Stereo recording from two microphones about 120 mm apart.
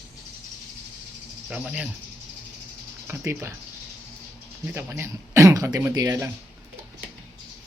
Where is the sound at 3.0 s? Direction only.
20° right (ahead or behind).